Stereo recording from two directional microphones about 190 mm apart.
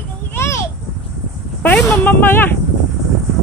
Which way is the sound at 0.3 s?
15° left (ahead or behind).